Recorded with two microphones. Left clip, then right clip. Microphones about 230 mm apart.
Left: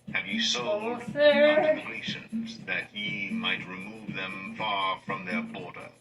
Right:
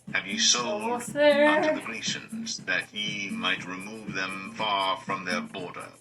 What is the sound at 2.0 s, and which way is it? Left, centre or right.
Speech, right.